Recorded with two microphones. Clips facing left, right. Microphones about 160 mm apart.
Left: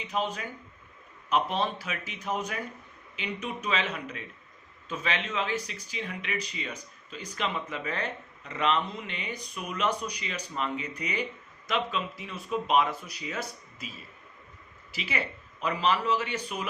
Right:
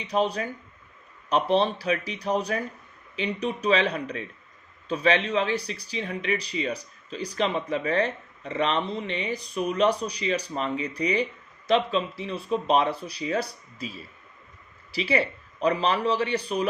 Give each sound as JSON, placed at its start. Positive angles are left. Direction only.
{"t": 0.1, "sound": "speech", "side_deg": -35}